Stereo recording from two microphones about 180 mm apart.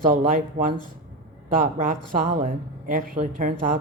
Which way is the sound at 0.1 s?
45° right (ahead or behind).